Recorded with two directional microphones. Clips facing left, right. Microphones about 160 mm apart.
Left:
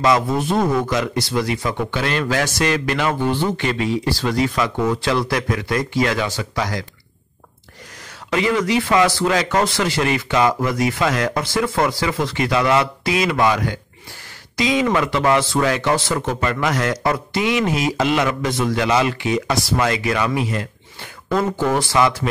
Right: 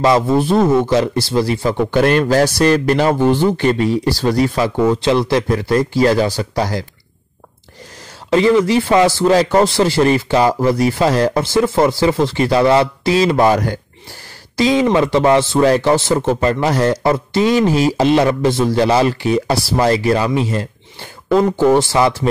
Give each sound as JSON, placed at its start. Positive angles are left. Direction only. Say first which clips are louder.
{"t": 0.0, "sound": "a man's voice", "louder": "right 4 dB", "side_deg": -30}
{"t": 2.0, "sound": "a man's voice", "louder": "right 10 dB", "side_deg": -50}
{"t": 8.3, "sound": "a man's voice", "louder": "right 7 dB", "side_deg": -30}
{"t": 14.6, "sound": "a man's voice", "louder": "right 5 dB", "side_deg": -30}